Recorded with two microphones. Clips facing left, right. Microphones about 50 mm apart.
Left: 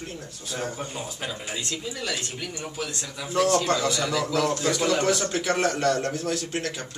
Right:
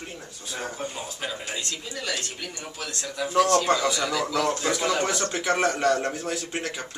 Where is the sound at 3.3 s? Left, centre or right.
Centre.